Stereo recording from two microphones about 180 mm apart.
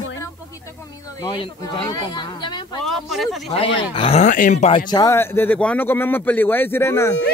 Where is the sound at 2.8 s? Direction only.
Centre (ahead or behind).